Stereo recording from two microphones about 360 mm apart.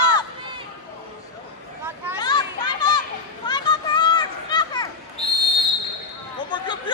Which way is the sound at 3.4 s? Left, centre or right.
Centre.